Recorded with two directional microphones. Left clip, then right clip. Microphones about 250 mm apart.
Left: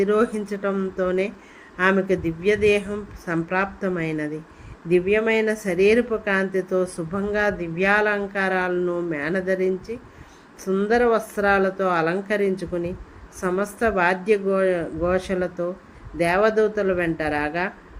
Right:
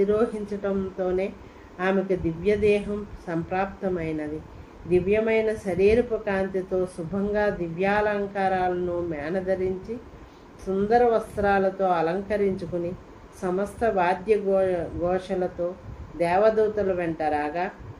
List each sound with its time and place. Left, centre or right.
0.0 s speech: left